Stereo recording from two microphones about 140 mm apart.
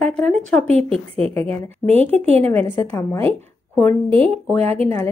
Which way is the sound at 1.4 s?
45° right (ahead or behind).